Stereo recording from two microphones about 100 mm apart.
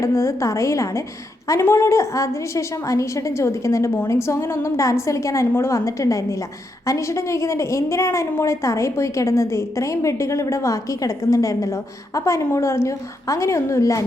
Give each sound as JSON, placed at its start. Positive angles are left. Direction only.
{"t": 0.0, "sound": "a woman's voice", "side_deg": 30}